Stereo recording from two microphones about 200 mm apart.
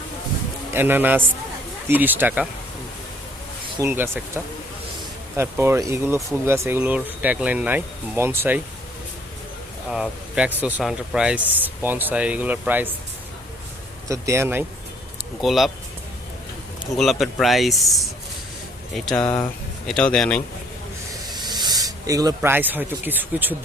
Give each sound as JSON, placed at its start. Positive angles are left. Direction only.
{"t": 0.7, "sound": "speech", "side_deg": -10}
{"t": 3.8, "sound": "speech", "side_deg": -10}
{"t": 5.4, "sound": "speech", "side_deg": -15}
{"t": 9.9, "sound": "speech", "side_deg": -5}
{"t": 14.1, "sound": "speech", "side_deg": -15}
{"t": 15.4, "sound": "speech", "side_deg": 0}
{"t": 17.0, "sound": "speech", "side_deg": 0}
{"t": 21.2, "sound": "speech", "side_deg": -20}